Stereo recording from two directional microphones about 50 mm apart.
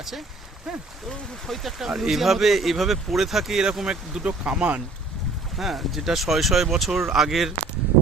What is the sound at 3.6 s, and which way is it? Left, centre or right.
Speech, centre.